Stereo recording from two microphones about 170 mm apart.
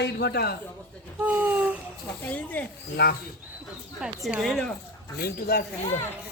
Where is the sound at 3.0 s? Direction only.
90° left.